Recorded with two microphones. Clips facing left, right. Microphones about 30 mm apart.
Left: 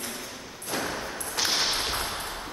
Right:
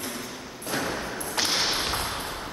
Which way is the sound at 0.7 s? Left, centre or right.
Centre.